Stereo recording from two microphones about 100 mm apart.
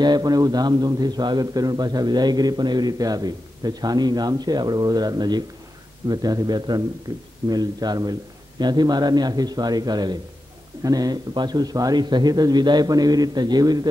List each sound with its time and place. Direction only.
0.0 s a man's voice: 45° right (ahead or behind)